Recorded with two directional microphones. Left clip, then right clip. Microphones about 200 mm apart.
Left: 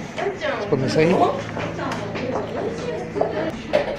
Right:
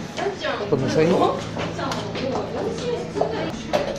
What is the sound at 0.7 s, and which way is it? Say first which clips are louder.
Speech: left 1 dB; 10° left (ahead or behind).